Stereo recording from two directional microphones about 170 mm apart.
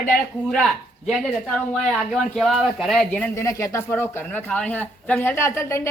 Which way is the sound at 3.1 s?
15° left (ahead or behind).